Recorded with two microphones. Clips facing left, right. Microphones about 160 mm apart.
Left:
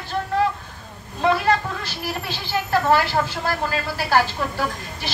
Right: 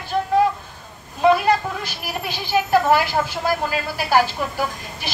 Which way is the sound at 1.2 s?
15° right (ahead or behind).